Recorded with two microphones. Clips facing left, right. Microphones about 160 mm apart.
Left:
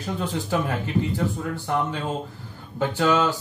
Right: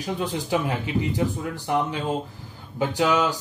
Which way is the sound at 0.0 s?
15° right (ahead or behind).